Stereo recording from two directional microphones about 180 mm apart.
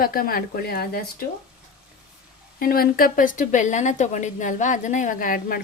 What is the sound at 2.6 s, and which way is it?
Speech, 55° left (ahead or behind).